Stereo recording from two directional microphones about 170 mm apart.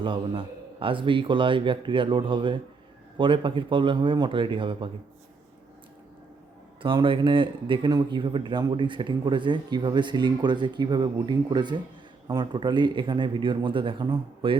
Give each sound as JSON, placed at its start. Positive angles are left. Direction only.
{"t": 0.0, "sound": "speech", "side_deg": -30}
{"t": 6.8, "sound": "speech", "side_deg": -30}